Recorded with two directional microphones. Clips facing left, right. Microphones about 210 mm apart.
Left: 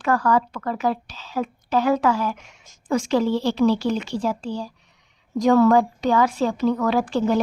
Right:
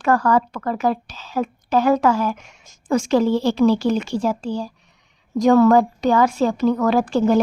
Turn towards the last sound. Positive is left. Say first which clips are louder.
# right 4 dB
turn(degrees=-45)  # may be behind; listen again after turning